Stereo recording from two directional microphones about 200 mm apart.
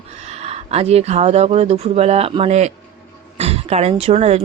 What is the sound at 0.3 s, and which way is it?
Speech, 30° right (ahead or behind).